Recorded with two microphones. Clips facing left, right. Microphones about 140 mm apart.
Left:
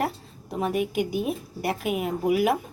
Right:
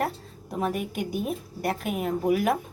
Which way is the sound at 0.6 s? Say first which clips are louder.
Left 3 dB; centre (ahead or behind).